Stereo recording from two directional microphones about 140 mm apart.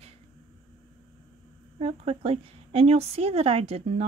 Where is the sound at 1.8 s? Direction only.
50° right (ahead or behind).